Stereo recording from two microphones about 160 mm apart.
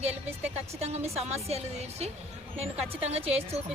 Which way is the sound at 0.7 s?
40° right (ahead or behind).